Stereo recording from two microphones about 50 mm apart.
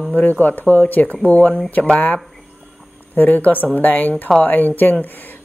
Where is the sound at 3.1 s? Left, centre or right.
Left.